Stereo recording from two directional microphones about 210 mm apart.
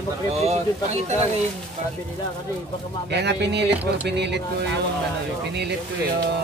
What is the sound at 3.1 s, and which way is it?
Speech, 55° right (ahead or behind).